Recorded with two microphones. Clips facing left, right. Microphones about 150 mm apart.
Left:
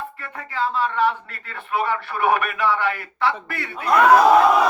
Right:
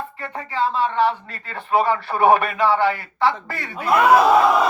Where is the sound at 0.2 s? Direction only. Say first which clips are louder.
Right 4 dB; 30° right (ahead or behind).